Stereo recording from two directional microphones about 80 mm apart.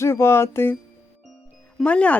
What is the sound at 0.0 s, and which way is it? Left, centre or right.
Speech, left.